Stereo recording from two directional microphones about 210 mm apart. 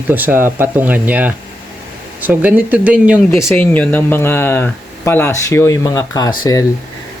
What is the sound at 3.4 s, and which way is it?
Speech, 10° left (ahead or behind).